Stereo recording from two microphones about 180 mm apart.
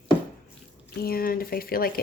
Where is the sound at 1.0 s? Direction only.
55° left (ahead or behind).